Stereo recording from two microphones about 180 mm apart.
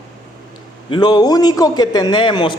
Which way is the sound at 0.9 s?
20° left (ahead or behind).